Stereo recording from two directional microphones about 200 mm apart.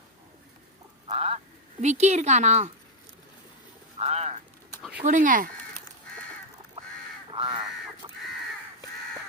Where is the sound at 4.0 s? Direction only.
30° right (ahead or behind).